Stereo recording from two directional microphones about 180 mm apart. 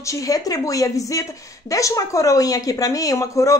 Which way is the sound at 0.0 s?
20° left (ahead or behind).